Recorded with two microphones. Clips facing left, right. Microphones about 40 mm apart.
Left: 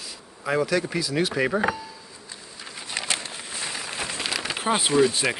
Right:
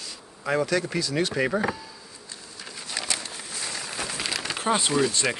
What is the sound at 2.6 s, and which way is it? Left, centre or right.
Pigeon, centre.